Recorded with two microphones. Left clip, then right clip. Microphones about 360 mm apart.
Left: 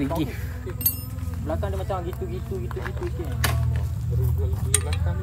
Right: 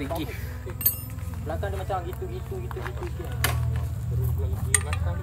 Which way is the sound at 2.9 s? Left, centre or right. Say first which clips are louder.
Left 3 dB; centre.